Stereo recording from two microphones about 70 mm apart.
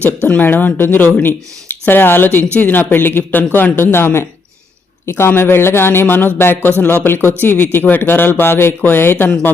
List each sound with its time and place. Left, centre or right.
0.3 s speech: left